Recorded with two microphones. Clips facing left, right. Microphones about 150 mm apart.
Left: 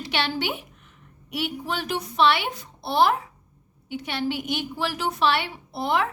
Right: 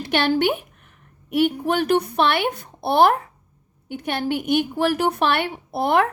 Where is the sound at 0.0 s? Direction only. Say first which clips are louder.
Right 8 dB; 50° right (ahead or behind).